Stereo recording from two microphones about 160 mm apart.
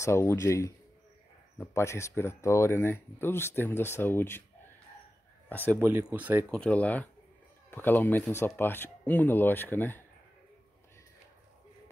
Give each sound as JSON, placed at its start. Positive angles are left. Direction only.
{"t": 0.0, "sound": "speech", "side_deg": 15}
{"t": 5.5, "sound": "speech", "side_deg": 10}
{"t": 5.8, "sound": "speech", "side_deg": -15}
{"t": 6.5, "sound": "speech", "side_deg": 5}